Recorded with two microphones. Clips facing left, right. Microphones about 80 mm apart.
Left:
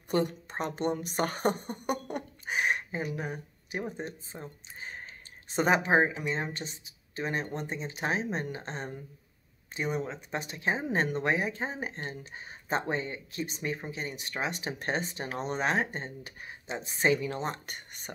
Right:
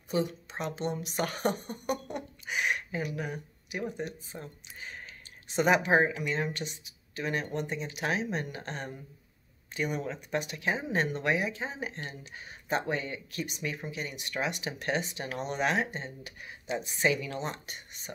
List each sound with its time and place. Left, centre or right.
0.1 s a woman's voice: left